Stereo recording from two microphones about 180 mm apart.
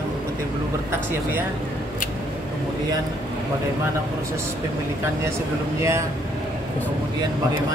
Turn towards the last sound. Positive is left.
turn(degrees=-15)  # may be behind; listen again after turning